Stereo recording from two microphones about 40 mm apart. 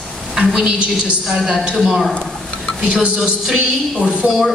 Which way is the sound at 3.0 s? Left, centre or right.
Centre.